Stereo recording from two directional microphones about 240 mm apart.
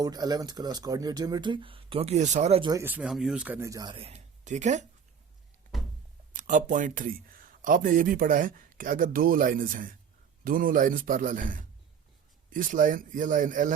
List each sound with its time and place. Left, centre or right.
0.0 s speech: centre
6.3 s speech: right